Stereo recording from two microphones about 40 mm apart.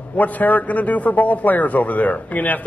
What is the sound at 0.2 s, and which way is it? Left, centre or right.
A man's voice, left.